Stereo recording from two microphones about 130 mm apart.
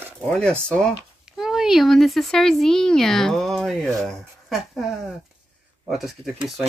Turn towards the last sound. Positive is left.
turn(degrees=0)  # may be behind; listen again after turning